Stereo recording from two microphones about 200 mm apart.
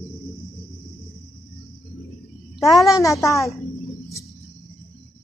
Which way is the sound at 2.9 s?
15° left (ahead or behind).